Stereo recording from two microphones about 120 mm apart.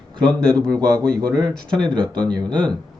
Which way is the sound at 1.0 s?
5° left (ahead or behind).